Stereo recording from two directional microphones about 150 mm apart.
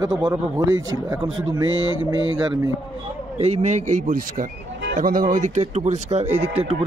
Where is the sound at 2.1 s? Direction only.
25° right (ahead or behind).